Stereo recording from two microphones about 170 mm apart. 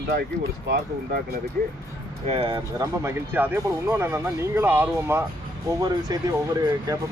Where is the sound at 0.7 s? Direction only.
60° right (ahead or behind).